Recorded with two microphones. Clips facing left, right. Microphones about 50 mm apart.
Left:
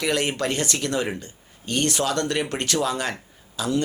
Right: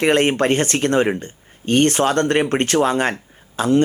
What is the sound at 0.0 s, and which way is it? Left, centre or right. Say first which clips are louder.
Speech: right 8 dB; right.